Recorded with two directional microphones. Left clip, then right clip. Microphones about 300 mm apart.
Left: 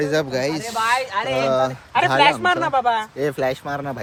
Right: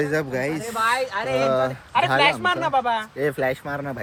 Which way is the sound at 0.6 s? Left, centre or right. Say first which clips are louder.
Even; left.